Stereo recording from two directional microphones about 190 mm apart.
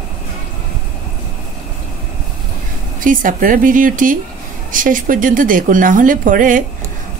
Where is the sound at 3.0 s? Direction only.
45° right (ahead or behind).